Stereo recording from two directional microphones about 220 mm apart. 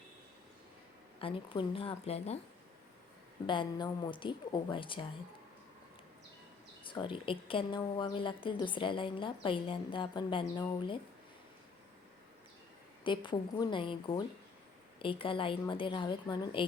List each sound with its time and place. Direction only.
1.2 s a woman's voice: 25° left (ahead or behind)
3.4 s a woman's voice: 20° left (ahead or behind)
6.8 s a woman's voice: 20° left (ahead or behind)
13.1 s a woman's voice: 20° left (ahead or behind)